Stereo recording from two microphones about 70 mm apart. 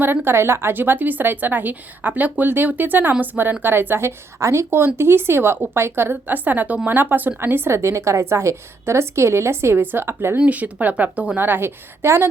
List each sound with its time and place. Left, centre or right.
0.0 s a woman's voice: right
4.4 s a woman's voice: right
10.3 s a woman's voice: right
11.3 s a woman's voice: right